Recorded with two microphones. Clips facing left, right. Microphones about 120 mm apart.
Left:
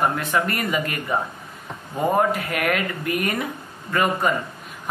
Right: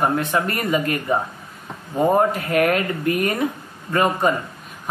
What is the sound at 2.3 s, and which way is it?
Speech, 35° right (ahead or behind).